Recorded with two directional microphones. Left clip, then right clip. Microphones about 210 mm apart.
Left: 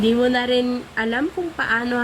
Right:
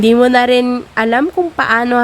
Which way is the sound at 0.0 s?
45° right (ahead or behind).